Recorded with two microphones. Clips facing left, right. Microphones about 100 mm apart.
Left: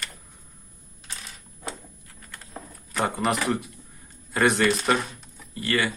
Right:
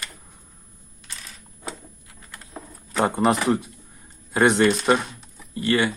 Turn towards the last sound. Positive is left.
turn(degrees=-25)  # may be behind; listen again after turning